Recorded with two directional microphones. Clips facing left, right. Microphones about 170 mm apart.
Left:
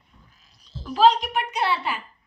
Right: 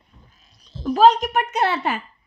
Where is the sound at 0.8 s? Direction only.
45° right (ahead or behind).